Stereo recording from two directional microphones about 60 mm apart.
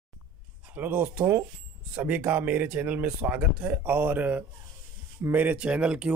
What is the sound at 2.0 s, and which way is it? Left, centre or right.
Speech, right.